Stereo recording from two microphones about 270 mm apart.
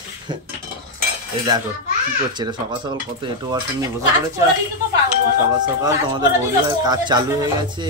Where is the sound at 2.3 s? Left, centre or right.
Centre.